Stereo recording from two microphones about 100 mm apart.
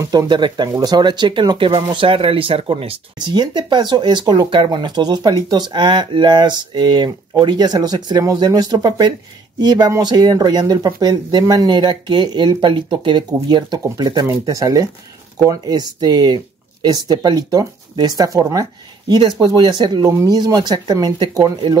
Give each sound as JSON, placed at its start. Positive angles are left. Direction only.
{"t": 0.0, "sound": "speech", "side_deg": -30}
{"t": 0.3, "sound": "speech", "side_deg": -50}
{"t": 3.3, "sound": "speech", "side_deg": -45}
{"t": 20.1, "sound": "speech", "side_deg": -35}